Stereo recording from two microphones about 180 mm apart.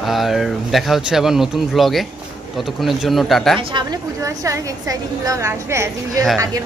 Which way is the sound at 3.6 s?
25° right (ahead or behind).